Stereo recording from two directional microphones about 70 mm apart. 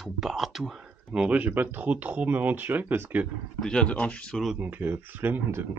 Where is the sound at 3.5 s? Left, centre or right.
Centre.